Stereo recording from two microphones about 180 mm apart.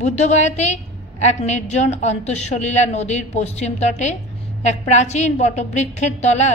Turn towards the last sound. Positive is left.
turn(degrees=40)  # may be behind; listen again after turning